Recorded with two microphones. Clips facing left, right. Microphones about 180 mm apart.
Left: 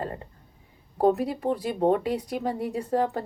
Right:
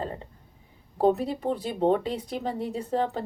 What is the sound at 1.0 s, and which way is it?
A woman's voice, 25° right (ahead or behind).